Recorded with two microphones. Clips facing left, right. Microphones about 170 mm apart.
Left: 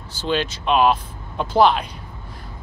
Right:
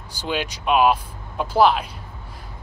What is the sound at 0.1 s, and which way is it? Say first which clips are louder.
Speech: left 3 dB; 10° right (ahead or behind).